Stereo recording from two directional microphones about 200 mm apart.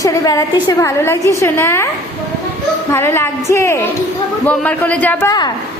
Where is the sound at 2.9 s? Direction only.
10° left (ahead or behind).